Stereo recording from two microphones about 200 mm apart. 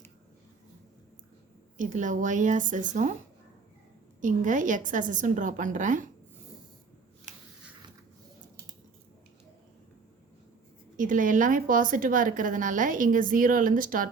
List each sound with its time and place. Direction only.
1.8 s a woman's voice: 40° right (ahead or behind)
4.2 s a woman's voice: 40° right (ahead or behind)
10.9 s a woman's voice: 40° right (ahead or behind)